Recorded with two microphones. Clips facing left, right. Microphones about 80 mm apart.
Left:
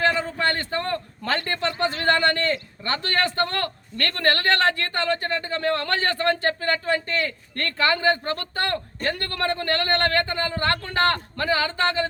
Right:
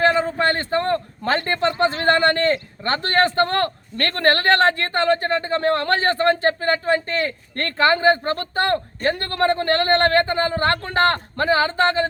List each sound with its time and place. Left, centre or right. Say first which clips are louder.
0.0 s a man's voice: right 4 dB; right